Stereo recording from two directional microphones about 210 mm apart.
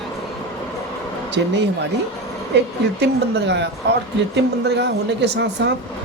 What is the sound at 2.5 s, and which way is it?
A woman's voice, 55° right (ahead or behind).